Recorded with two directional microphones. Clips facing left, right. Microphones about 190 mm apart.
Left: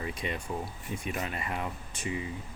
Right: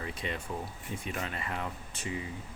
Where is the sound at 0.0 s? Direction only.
15° left (ahead or behind).